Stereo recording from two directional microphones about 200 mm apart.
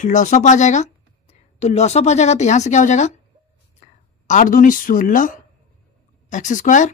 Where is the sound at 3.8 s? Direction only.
35° left (ahead or behind).